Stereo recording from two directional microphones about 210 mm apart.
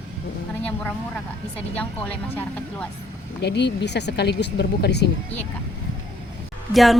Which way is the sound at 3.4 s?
55° left (ahead or behind).